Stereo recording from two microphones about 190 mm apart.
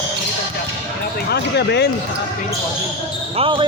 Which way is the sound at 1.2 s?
60° left (ahead or behind).